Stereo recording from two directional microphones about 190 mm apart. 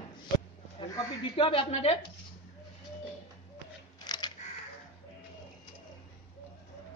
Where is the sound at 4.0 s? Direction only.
20° left (ahead or behind).